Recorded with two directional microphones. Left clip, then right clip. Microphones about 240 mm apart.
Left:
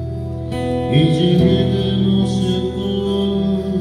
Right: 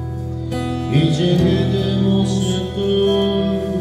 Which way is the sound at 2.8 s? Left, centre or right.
Right.